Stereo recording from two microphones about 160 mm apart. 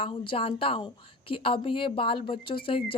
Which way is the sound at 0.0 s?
35° left (ahead or behind).